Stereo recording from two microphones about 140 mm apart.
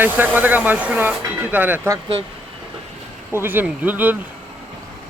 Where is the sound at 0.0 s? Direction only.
15° right (ahead or behind).